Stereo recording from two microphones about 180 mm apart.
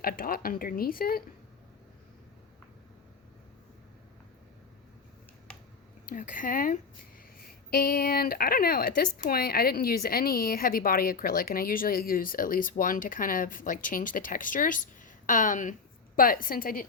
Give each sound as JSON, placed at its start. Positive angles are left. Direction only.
{"t": 0.0, "sound": "a woman's voice", "side_deg": 55}
{"t": 6.1, "sound": "a woman's voice", "side_deg": 45}